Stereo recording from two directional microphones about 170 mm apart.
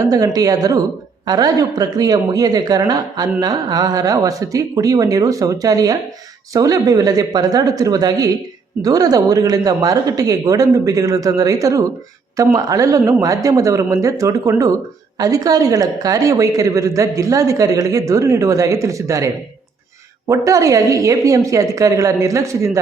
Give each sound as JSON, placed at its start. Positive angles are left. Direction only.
{"t": 0.0, "sound": "a woman's voice", "side_deg": -20}